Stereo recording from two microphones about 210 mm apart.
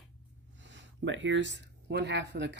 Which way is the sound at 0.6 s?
60° right (ahead or behind).